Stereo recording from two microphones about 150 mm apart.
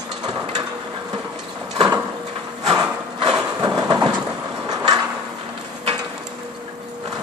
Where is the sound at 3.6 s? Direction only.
25° right (ahead or behind).